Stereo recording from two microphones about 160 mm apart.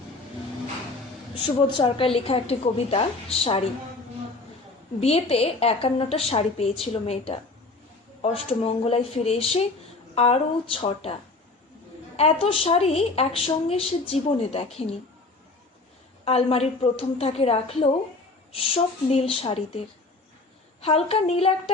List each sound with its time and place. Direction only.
1.5 s a woman's voice: 30° left (ahead or behind)
4.9 s a woman's voice: 40° left (ahead or behind)
16.2 s a woman's voice: 40° left (ahead or behind)
20.8 s a woman's voice: 40° left (ahead or behind)